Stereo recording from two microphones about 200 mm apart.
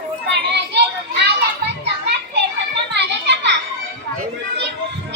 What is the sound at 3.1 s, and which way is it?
Children playing, 60° right (ahead or behind).